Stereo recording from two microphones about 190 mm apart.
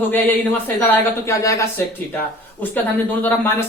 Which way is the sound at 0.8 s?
15° left (ahead or behind).